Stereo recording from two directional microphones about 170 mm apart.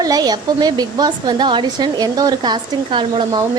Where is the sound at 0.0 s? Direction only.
20° right (ahead or behind).